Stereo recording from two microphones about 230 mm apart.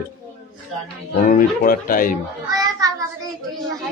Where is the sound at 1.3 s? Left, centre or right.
Left.